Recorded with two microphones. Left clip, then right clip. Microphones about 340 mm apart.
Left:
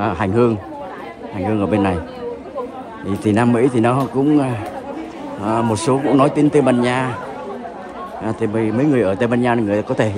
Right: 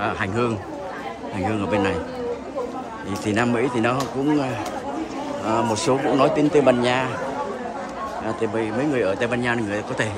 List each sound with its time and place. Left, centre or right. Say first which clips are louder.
0.0 s speech: left 6 dB; centre
3.1 s a man's voice: left 6 dB; centre
8.9 s speech: left 5 dB; centre